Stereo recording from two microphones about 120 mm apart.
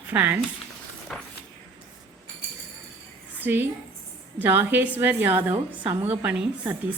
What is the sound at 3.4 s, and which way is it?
A woman's voice, 15° right (ahead or behind).